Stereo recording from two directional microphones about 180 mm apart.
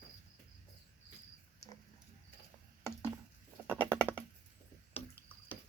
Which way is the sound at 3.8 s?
15° right (ahead or behind).